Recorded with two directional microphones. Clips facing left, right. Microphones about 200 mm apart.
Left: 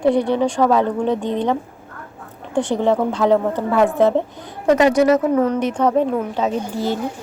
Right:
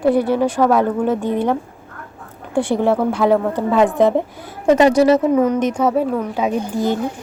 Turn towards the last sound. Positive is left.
turn(degrees=-15)  # may be behind; listen again after turning